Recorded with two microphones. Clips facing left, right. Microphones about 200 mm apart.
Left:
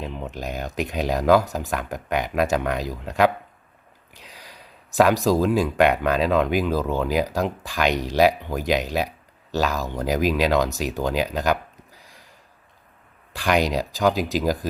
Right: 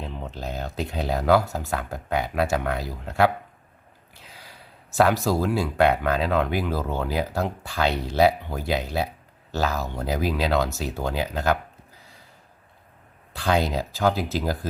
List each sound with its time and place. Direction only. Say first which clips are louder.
0.0 s speech: left 3 dB; 15° left (ahead or behind)
4.1 s a sound: left 2 dB; 15° left (ahead or behind)
5.4 s speech: left 3 dB; 15° left (ahead or behind)
8.7 s speech: left 3 dB; 90° left
9.5 s speech: left 2 dB; 15° left (ahead or behind)
13.3 s speech: left 2 dB; 85° left
13.7 s speech: left 2 dB; 15° left (ahead or behind)